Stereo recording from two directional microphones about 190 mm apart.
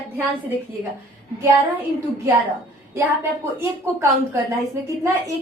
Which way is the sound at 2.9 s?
15° right (ahead or behind).